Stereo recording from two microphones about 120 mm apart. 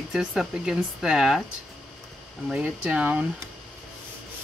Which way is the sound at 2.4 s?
10° right (ahead or behind).